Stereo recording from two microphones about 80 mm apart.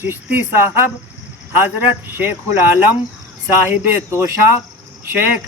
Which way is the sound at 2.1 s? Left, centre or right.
Right.